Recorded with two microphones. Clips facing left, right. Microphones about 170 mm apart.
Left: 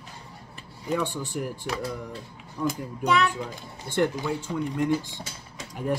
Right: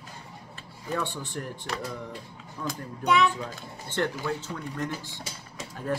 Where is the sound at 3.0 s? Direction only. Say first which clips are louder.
Even; centre (ahead or behind).